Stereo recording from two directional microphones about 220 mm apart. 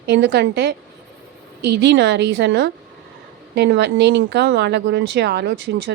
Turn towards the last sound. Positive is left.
turn(degrees=-50)  # may be behind; listen again after turning